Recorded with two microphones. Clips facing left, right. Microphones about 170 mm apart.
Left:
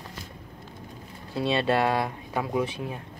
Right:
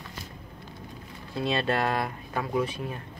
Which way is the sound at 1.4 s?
25° left (ahead or behind).